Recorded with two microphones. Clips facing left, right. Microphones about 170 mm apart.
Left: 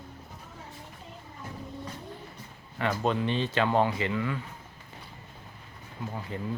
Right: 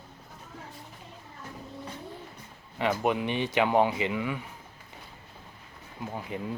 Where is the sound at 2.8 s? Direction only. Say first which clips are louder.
Right 1 dB; 15° right (ahead or behind).